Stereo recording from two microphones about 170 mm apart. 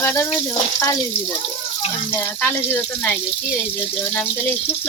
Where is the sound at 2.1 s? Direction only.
10° left (ahead or behind).